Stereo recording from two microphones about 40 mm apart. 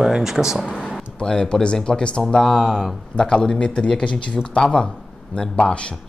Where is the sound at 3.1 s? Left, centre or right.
Left.